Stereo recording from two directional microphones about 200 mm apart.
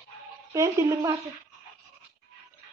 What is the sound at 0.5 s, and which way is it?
Speech, 15° right (ahead or behind).